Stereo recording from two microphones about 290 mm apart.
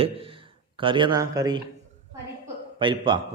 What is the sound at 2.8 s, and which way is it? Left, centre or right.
Speech, centre.